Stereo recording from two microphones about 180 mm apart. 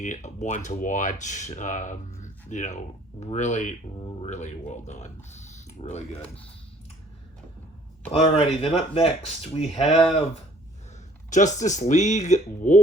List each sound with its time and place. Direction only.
0.0 s speech: 40° left (ahead or behind)
8.1 s speech: 35° left (ahead or behind)
11.3 s speech: 45° left (ahead or behind)